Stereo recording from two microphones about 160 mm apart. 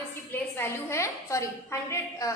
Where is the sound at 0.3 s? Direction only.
15° left (ahead or behind).